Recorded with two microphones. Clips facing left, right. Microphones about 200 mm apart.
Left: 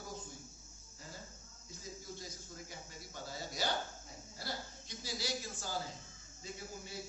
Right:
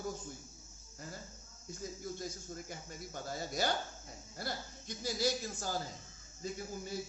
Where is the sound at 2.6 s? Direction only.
50° right (ahead or behind).